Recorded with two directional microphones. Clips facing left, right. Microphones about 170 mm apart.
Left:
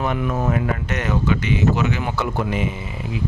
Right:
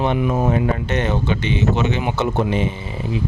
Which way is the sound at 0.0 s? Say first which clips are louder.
Right 4 dB; 25° right (ahead or behind).